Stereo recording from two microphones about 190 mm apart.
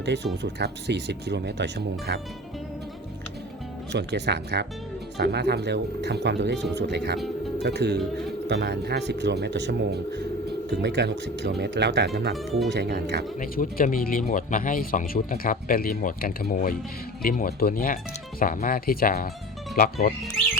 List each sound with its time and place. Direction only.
0.0 s speech: 65° right (ahead or behind)
3.9 s speech: 60° right (ahead or behind)
13.4 s speech: 45° left (ahead or behind)